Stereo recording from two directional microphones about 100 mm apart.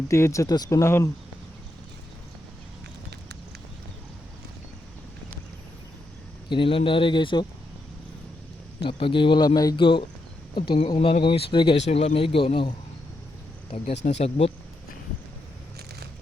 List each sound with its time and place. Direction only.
0.1 s speech: 30° left (ahead or behind)
6.5 s speech: 60° left (ahead or behind)
8.9 s speech: 60° left (ahead or behind); by 9.7 s 40° left (ahead or behind)
9.7 s speech: 60° left (ahead or behind)
13.7 s speech: 85° left